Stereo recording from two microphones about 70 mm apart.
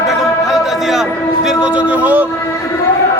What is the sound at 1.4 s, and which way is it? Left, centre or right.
Speech, centre.